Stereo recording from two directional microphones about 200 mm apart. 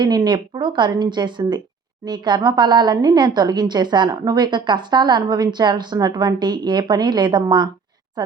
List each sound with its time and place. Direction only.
0.0 s a woman's voice: 20° right (ahead or behind)